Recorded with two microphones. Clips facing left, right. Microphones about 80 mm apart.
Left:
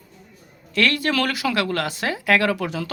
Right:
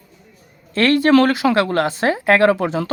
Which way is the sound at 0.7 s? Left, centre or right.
Right.